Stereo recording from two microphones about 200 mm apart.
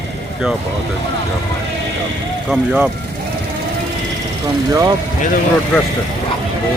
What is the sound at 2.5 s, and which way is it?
Speech, 5° right (ahead or behind).